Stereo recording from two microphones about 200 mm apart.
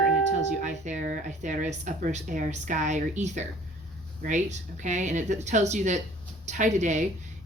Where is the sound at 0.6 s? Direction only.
35° right (ahead or behind).